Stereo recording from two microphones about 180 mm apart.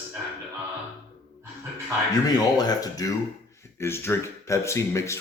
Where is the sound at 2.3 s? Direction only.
20° left (ahead or behind).